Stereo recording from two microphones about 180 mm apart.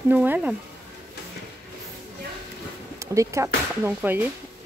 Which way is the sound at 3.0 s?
15° right (ahead or behind).